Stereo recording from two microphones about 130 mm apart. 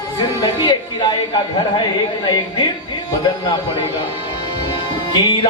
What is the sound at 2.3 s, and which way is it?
Music, 35° left (ahead or behind).